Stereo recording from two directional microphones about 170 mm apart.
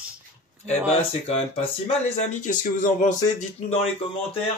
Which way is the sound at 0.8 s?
35° left (ahead or behind).